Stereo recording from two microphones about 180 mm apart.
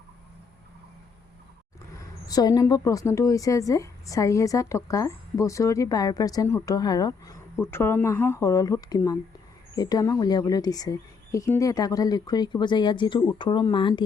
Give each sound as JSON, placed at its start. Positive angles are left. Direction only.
{"t": 2.2, "sound": "a woman's voice", "side_deg": 20}